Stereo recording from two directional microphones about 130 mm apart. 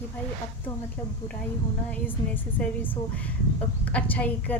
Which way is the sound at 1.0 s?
15° left (ahead or behind).